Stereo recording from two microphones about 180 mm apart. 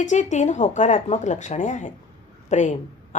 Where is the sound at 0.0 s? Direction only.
40° left (ahead or behind).